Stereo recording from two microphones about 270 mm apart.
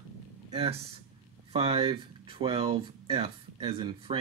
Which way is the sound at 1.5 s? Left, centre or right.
Right.